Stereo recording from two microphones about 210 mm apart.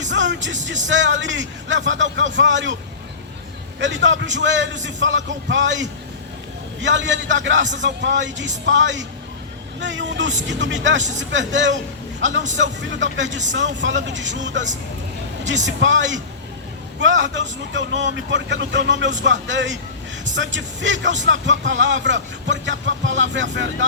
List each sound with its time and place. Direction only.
0.0 s music: 60° right (ahead or behind)
0.9 s speech: 60° right (ahead or behind)
3.8 s speech: 60° right (ahead or behind)